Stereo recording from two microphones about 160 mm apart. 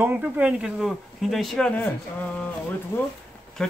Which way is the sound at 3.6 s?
5° left (ahead or behind).